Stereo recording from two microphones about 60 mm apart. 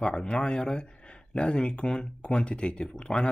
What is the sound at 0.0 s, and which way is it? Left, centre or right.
Speech, centre.